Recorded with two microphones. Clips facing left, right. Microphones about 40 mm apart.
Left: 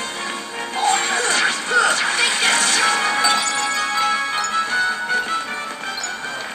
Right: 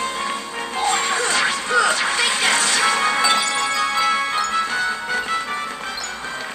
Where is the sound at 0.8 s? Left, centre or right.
Centre.